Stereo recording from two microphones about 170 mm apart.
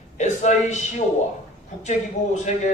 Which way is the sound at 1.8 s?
45° left (ahead or behind).